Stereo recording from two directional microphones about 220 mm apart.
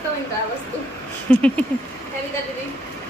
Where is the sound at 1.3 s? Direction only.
5° left (ahead or behind).